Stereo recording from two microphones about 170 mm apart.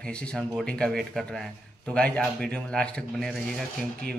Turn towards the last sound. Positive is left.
turn(degrees=5)  # may be behind; listen again after turning